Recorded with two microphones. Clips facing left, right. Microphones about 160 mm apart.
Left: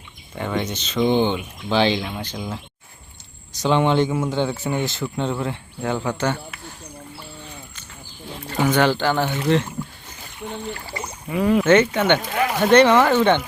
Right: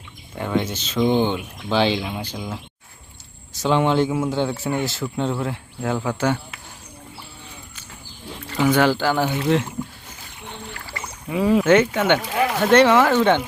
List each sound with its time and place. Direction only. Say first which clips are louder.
0.3 s speech: right 2 dB; 5° right (ahead or behind)
8.6 s speech: right 1 dB; 5° right (ahead or behind)
10.8 s a sound: left 3 dB; 20° left (ahead or behind)
11.3 s speech: even; 5° right (ahead or behind)